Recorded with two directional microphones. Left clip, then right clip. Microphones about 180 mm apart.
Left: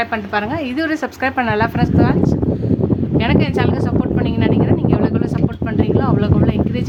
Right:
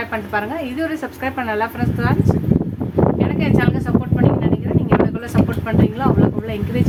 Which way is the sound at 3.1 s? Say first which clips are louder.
Left 3 dB; 45° left (ahead or behind).